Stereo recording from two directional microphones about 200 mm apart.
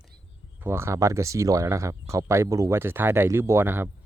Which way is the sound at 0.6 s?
10° right (ahead or behind).